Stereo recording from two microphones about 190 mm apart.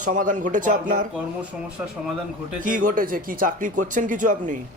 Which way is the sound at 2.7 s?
45° right (ahead or behind).